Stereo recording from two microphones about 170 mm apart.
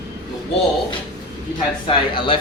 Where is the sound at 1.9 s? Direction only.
30° left (ahead or behind).